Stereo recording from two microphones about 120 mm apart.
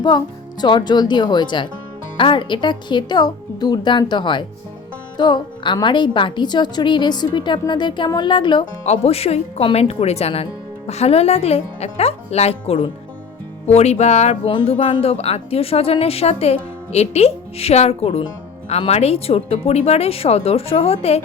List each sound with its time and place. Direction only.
0.6 s a woman's voice: 40° left (ahead or behind)
8.8 s speech: 60° left (ahead or behind)
13.7 s speech: 65° left (ahead or behind)